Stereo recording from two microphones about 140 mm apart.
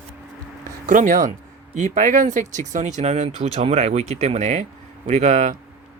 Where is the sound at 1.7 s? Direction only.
55° right (ahead or behind).